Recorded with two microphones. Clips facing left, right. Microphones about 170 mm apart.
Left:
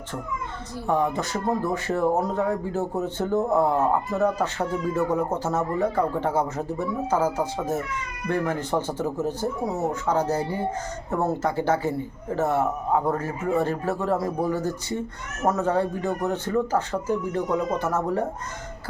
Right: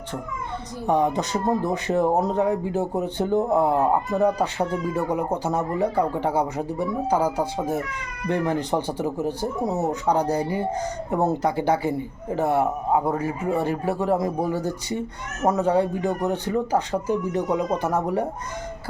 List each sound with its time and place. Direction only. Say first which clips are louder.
0.9 s speech: right 2 dB; 20° right (ahead or behind)